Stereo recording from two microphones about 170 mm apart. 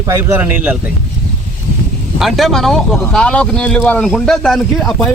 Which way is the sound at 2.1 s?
Centre (ahead or behind).